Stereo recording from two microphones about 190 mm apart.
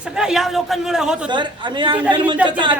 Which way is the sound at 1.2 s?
25° right (ahead or behind).